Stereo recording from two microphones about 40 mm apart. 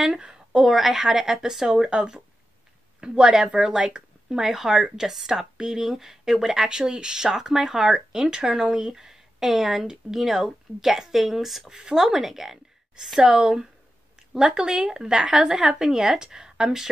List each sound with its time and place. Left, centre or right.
0.2 s a sound: right
0.6 s speech: centre
11.7 s speech: centre